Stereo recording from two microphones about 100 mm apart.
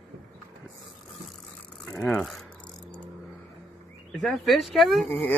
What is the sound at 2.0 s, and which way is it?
Speech, 5° left (ahead or behind).